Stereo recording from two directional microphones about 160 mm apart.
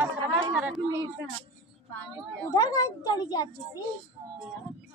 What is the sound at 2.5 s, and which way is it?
A woman's voice, 25° left (ahead or behind).